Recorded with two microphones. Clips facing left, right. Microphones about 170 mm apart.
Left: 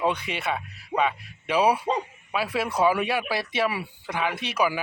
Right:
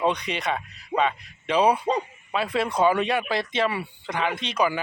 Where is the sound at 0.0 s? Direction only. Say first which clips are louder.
Right 1 dB; 5° left (ahead or behind).